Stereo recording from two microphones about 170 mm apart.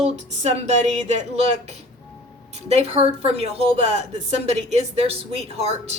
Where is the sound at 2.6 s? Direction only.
40° right (ahead or behind).